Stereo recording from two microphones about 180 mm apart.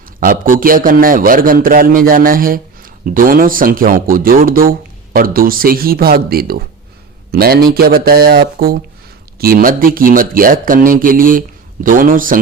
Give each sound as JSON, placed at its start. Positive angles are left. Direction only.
{"t": 0.2, "sound": "a man's voice", "side_deg": -50}